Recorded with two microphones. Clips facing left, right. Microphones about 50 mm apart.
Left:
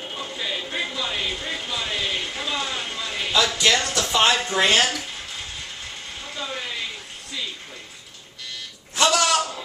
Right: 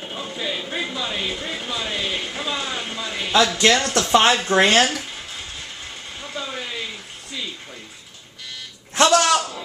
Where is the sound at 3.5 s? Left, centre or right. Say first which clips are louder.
Right 3 dB; right.